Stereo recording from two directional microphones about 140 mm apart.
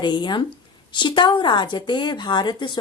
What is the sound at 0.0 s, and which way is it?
Speech, 35° left (ahead or behind).